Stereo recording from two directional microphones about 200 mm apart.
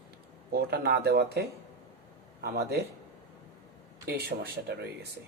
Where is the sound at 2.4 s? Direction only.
55° right (ahead or behind).